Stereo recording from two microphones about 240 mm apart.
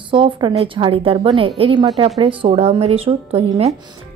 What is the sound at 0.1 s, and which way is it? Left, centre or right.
A woman's voice, centre.